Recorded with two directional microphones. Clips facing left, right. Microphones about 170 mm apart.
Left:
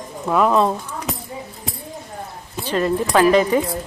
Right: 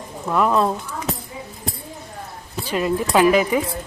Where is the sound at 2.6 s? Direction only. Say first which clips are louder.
Left 2 dB; 10° right (ahead or behind).